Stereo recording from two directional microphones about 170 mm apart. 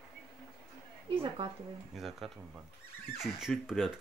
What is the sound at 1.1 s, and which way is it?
Speech, 30° right (ahead or behind).